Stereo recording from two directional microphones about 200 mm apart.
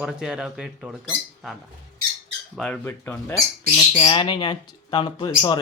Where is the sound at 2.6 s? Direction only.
5° left (ahead or behind).